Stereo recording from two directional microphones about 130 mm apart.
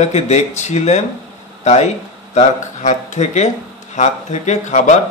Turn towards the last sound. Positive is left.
turn(degrees=65)  # may be behind; listen again after turning